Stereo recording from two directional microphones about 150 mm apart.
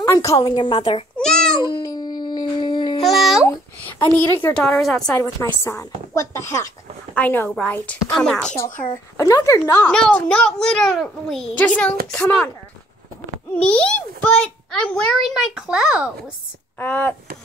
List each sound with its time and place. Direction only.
0.0 s speech: 20° left (ahead or behind)
1.1 s a sound: 5° left (ahead or behind)
1.6 s dog: 30° left (ahead or behind)
3.0 s babbling: centre (ahead or behind)
4.2 s a child's voice: 10° left (ahead or behind)
5.1 s a child's voice: 15° left (ahead or behind)
9.1 s a child's voice: 20° left (ahead or behind); by 12.4 s 5° left (ahead or behind)
13.7 s a child's voice: 5° left (ahead or behind)
16.7 s speech: 10° left (ahead or behind)